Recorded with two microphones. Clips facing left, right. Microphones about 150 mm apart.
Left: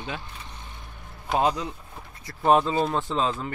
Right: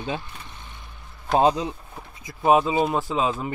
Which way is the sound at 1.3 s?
25° right (ahead or behind).